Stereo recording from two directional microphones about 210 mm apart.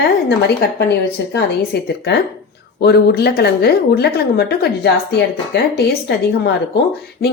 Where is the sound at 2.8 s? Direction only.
50° left (ahead or behind).